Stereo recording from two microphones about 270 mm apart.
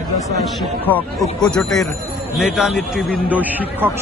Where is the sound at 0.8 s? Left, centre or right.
Centre.